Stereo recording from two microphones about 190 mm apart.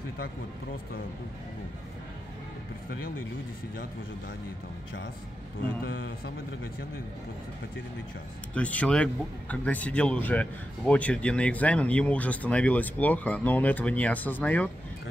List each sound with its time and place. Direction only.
5.9 s a man's voice: 50° left (ahead or behind)
8.5 s speech: 5° left (ahead or behind)